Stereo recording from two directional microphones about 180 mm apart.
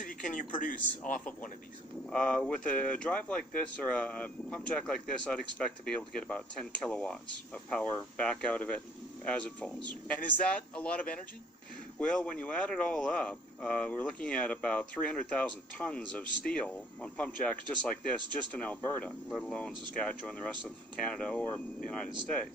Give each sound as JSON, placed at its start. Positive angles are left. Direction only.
{"t": 0.0, "sound": "speech", "side_deg": 50}
{"t": 2.0, "sound": "speech", "side_deg": 5}
{"t": 12.0, "sound": "speech", "side_deg": 5}